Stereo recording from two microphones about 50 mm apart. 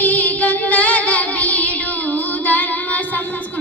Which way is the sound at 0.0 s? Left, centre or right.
Left.